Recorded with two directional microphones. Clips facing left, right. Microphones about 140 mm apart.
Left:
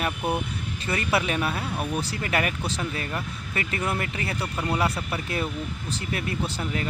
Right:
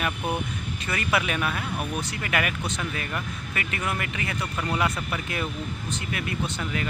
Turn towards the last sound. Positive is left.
turn(degrees=30)  # may be behind; listen again after turning